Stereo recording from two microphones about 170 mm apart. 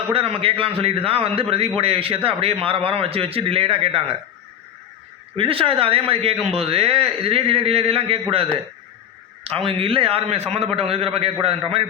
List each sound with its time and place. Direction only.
0.1 s speech: 35° right (ahead or behind)
5.4 s speech: 35° right (ahead or behind)
9.4 s speech: 35° right (ahead or behind)